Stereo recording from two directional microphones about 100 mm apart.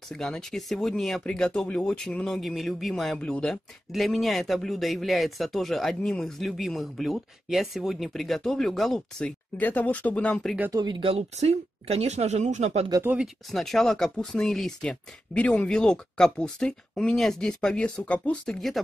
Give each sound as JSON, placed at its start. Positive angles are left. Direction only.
{"t": 0.1, "sound": "speech", "side_deg": 5}
{"t": 9.6, "sound": "speech", "side_deg": 15}
{"t": 10.7, "sound": "speech", "side_deg": -45}
{"t": 11.0, "sound": "speech", "side_deg": -80}
{"t": 13.0, "sound": "speech", "side_deg": -15}
{"t": 13.5, "sound": "speech", "side_deg": 0}